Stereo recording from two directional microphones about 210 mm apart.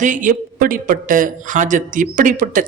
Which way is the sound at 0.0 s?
40° right (ahead or behind).